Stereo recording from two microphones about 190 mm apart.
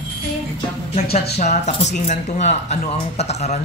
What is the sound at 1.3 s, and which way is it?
Speech, 35° left (ahead or behind).